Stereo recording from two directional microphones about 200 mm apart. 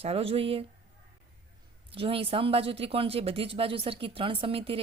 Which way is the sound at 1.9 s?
25° right (ahead or behind).